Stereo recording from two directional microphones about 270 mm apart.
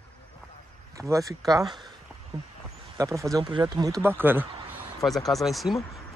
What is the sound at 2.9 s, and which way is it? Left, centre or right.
Speech, centre.